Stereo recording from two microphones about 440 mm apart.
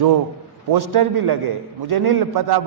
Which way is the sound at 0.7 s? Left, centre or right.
Right.